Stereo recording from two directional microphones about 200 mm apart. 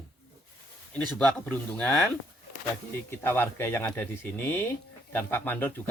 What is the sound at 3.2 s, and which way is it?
A man's voice, 10° left (ahead or behind).